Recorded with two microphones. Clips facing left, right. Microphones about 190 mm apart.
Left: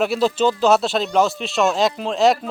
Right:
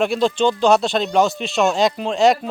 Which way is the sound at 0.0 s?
5° left (ahead or behind).